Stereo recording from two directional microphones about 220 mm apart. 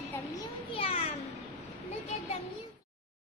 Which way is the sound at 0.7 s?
25° left (ahead or behind).